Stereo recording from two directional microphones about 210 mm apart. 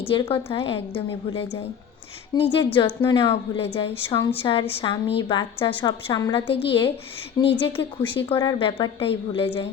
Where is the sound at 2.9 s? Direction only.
10° left (ahead or behind).